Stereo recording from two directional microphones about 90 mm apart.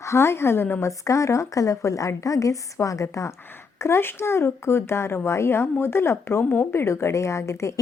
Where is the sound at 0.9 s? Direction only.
35° left (ahead or behind).